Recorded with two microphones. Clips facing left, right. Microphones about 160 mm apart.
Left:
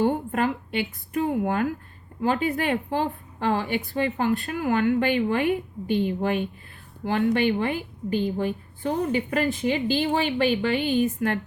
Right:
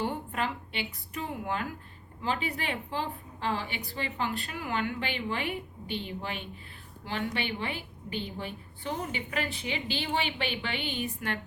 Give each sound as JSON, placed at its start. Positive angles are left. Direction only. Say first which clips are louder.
{"t": 0.0, "sound": "a woman's voice", "louder": "left 9 dB", "side_deg": 45}